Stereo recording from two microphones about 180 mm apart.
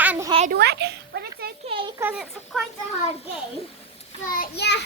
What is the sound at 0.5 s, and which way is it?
Speech, 65° right (ahead or behind).